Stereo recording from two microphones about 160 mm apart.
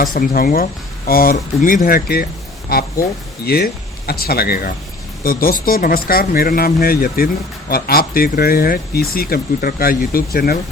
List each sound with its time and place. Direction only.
0.0 s speech: 65° left (ahead or behind)